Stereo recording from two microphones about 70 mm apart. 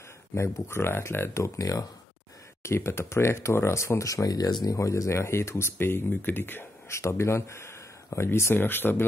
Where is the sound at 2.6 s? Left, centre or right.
Left.